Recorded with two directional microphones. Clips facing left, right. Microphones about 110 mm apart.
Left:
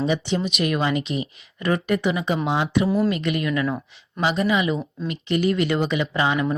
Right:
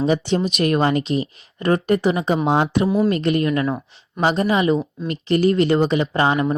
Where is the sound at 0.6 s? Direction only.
40° right (ahead or behind).